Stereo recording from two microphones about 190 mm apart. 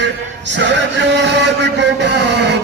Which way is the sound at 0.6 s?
70° right (ahead or behind).